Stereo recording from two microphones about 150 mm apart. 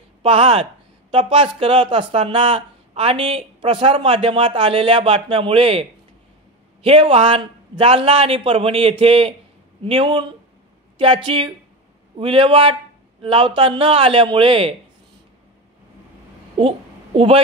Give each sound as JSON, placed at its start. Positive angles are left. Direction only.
{"t": 0.2, "sound": "speech", "side_deg": -40}
{"t": 16.5, "sound": "a woman's voice", "side_deg": -40}